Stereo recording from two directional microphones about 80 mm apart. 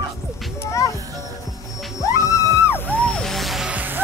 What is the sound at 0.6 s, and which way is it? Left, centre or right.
Music, left.